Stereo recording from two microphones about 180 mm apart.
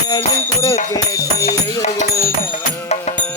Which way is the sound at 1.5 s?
40° left (ahead or behind).